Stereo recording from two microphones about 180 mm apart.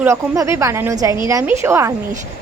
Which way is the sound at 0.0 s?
15° right (ahead or behind).